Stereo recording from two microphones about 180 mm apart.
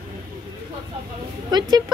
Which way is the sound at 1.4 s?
20° right (ahead or behind).